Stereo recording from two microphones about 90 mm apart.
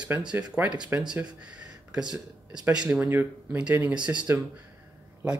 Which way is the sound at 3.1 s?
20° right (ahead or behind).